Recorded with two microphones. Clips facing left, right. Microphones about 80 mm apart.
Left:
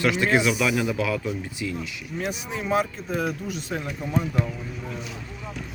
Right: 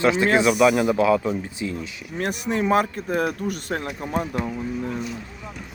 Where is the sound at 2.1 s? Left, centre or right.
Right.